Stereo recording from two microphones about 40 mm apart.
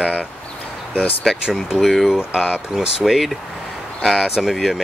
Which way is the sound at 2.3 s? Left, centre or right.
Right.